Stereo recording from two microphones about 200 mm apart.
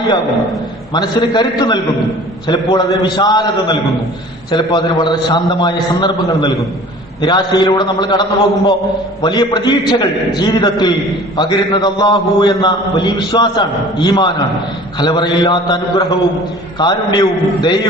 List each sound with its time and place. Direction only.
0.9 s a man's voice: 20° left (ahead or behind)